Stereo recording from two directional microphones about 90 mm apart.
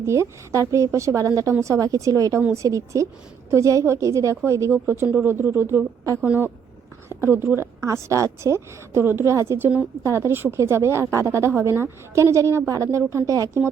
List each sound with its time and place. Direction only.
0.0 s a woman's voice: 35° right (ahead or behind)